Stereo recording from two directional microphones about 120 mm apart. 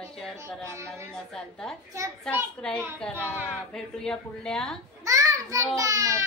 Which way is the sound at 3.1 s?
20° right (ahead or behind).